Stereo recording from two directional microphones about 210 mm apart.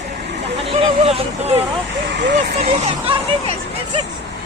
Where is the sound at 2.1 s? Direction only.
55° right (ahead or behind).